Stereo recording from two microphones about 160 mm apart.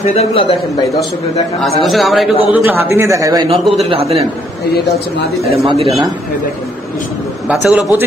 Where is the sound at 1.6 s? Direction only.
Centre (ahead or behind).